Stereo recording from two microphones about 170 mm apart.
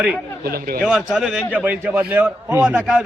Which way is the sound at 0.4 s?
60° right (ahead or behind).